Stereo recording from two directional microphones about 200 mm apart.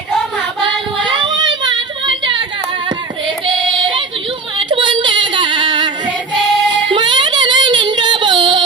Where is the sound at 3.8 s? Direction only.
25° right (ahead or behind).